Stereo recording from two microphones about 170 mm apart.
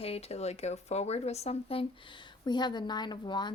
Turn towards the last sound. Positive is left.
turn(degrees=25)  # may be behind; listen again after turning